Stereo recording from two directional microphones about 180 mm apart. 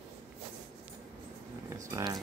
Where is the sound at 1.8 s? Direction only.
15° right (ahead or behind).